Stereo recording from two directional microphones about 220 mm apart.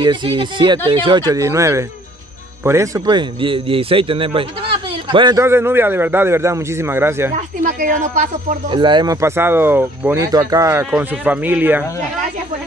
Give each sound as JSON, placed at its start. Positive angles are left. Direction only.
{"t": 0.0, "sound": "a man's voice", "side_deg": -20}
{"t": 7.3, "sound": "speech", "side_deg": -35}
{"t": 8.6, "sound": "a man's voice", "side_deg": -20}